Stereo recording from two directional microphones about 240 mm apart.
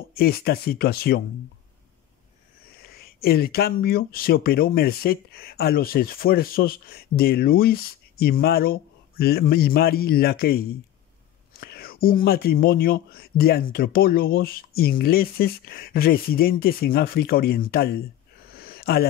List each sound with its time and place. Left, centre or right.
0.1 s speech: left
2.7 s speech: left
18.5 s a sound: left